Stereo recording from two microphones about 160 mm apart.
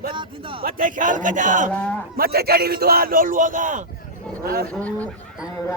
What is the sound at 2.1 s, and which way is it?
Speech, 75° right (ahead or behind).